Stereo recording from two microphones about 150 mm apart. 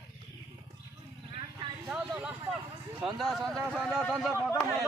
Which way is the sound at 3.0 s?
Centre (ahead or behind).